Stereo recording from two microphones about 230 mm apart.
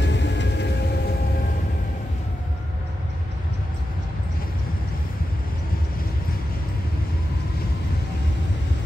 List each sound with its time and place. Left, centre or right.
0.0 s vehicle: left